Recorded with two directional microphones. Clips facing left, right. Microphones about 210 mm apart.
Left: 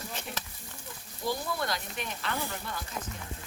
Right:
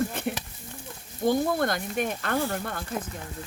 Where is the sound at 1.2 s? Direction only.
50° right (ahead or behind).